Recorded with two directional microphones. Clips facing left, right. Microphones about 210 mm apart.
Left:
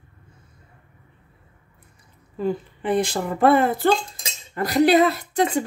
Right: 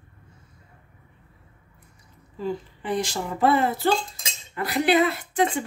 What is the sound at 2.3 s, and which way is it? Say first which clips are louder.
Speech: left 4 dB; 55° left (ahead or behind).